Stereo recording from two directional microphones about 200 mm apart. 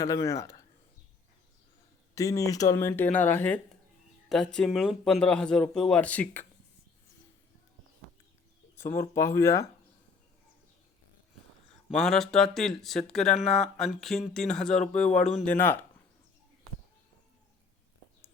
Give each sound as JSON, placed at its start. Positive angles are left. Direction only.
{"t": 0.0, "sound": "speech", "side_deg": 15}
{"t": 2.1, "sound": "speech", "side_deg": 15}
{"t": 9.0, "sound": "speech", "side_deg": 15}
{"t": 11.9, "sound": "speech", "side_deg": 0}